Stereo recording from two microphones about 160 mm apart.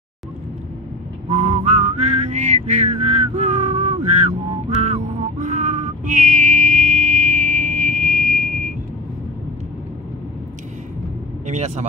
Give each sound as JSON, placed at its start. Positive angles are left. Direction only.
{"t": 1.3, "sound": "whistling", "side_deg": -45}
{"t": 11.4, "sound": "speech", "side_deg": -45}